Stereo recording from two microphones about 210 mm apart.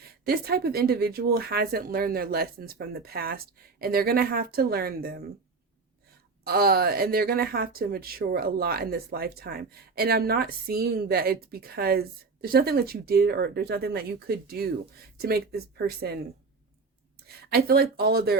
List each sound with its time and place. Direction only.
0.0 s speech: 50° right (ahead or behind)
6.4 s speech: 45° right (ahead or behind)
17.2 s speech: 50° right (ahead or behind)